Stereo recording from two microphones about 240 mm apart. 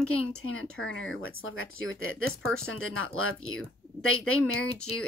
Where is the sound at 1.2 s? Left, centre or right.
Left.